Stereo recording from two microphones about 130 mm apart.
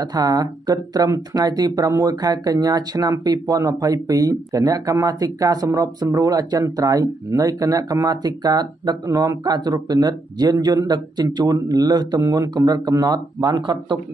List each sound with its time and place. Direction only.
0.0 s speech: 30° right (ahead or behind)